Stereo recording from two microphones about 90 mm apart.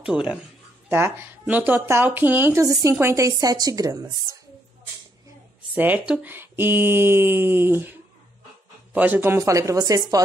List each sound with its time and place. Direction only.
0.0 s speech: 10° right (ahead or behind)
0.8 s a woman's voice: 25° right (ahead or behind)
5.8 s speech: 20° right (ahead or behind)
8.9 s speech: 20° right (ahead or behind)
9.4 s a woman's voice: 35° right (ahead or behind)